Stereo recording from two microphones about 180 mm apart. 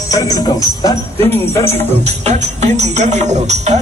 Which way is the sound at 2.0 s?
40° right (ahead or behind).